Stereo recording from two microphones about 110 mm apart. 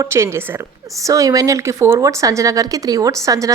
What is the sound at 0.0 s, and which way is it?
Speech, 25° right (ahead or behind).